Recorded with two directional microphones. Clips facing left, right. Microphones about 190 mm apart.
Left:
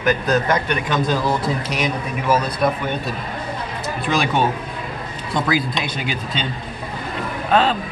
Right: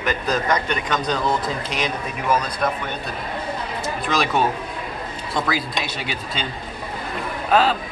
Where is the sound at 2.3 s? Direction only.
10° left (ahead or behind).